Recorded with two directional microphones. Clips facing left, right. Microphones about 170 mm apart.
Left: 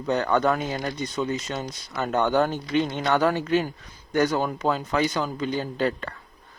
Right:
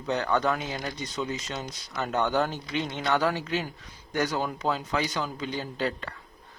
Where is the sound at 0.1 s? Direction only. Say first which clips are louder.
Left 4 dB; 50° left (ahead or behind).